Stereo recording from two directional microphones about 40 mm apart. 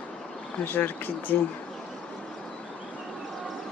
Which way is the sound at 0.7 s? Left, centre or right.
Left.